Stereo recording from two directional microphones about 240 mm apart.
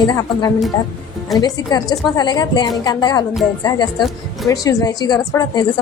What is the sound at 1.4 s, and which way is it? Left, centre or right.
A woman's voice, centre.